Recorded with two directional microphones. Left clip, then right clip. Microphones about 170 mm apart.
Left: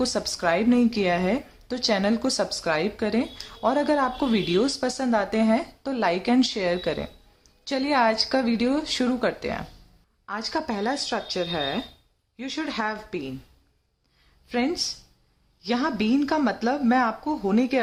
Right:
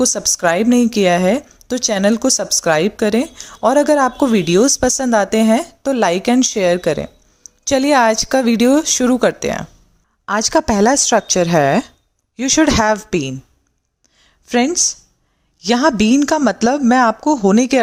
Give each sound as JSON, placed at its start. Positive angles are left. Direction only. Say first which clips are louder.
{"t": 0.0, "sound": "speech", "louder": "right 9 dB", "side_deg": -35}
{"t": 10.2, "sound": "a woman's voice", "louder": "right 14 dB", "side_deg": -50}
{"t": 15.6, "sound": "a woman's voice", "louder": "right 12 dB", "side_deg": -45}